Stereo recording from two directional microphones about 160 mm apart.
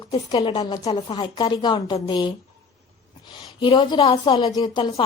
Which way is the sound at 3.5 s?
30° left (ahead or behind).